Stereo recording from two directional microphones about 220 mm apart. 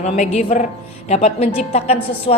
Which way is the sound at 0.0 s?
30° left (ahead or behind).